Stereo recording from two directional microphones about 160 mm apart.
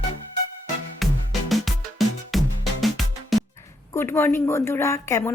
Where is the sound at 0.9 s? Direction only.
Centre (ahead or behind).